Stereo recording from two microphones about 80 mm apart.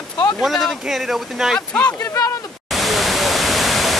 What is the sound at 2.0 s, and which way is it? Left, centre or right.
Speech, left.